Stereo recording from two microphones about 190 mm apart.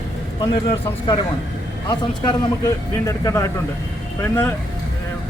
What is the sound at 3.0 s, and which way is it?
Speech, 15° left (ahead or behind).